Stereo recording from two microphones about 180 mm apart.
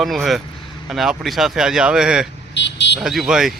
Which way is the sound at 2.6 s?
75° left (ahead or behind).